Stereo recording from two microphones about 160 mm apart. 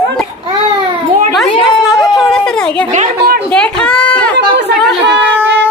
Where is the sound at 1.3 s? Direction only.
Centre (ahead or behind).